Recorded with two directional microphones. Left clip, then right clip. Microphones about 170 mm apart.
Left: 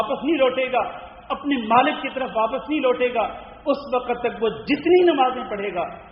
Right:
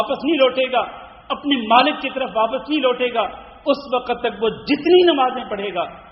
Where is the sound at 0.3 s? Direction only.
30° right (ahead or behind).